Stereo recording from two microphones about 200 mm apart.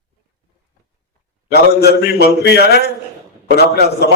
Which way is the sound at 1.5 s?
55° left (ahead or behind).